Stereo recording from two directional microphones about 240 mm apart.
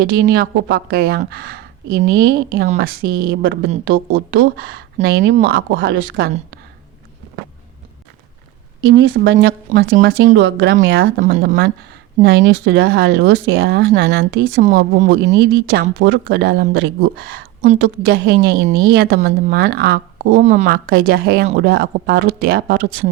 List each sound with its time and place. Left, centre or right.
0.0 s speech: right
8.8 s speech: right
11.2 s speech: right
11.4 s speech: right
15.2 s speech: right